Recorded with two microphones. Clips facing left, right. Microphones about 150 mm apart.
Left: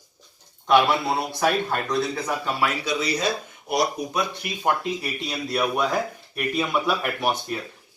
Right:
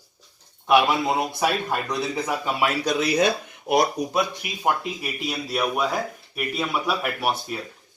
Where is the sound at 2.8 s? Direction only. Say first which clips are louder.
Right 4 dB; 60° right (ahead or behind).